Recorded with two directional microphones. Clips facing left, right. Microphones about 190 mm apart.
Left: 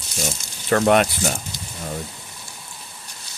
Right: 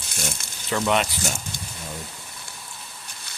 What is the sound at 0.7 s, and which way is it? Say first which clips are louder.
Speech: left 6 dB; 55° left (ahead or behind).